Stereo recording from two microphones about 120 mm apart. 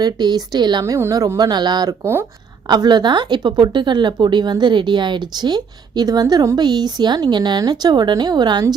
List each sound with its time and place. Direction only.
0.0 s speech: 35° right (ahead or behind)
0.9 s speech: 25° right (ahead or behind)